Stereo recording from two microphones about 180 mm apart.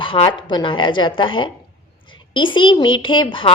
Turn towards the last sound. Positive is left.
turn(degrees=25)  # may be behind; listen again after turning